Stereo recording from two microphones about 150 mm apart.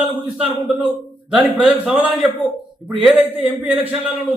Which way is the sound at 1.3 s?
5° right (ahead or behind).